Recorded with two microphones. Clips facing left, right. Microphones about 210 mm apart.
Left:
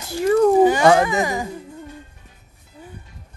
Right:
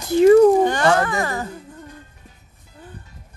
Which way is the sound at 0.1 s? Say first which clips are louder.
Right 6 dB; 15° right (ahead or behind).